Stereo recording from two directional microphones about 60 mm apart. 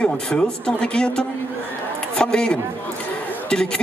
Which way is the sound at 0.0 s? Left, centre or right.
Centre.